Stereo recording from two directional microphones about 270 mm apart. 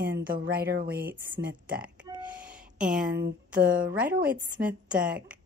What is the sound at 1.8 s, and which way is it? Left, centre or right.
Music, centre.